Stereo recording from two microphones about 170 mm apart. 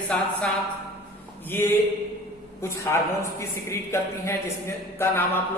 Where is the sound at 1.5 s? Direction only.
10° left (ahead or behind).